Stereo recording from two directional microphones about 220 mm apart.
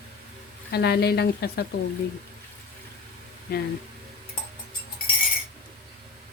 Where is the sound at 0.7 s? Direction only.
45° left (ahead or behind).